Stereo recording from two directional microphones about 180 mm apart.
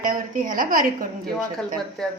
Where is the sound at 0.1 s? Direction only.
45° right (ahead or behind).